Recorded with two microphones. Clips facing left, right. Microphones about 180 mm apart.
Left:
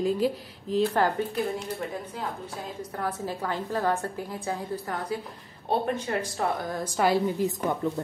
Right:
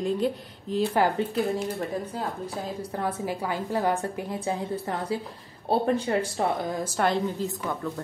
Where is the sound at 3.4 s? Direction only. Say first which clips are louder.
Right 1 dB; 10° right (ahead or behind); by 6.5 s 30° right (ahead or behind).